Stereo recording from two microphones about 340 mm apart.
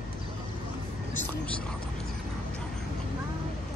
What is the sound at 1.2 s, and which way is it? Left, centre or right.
Speech, centre.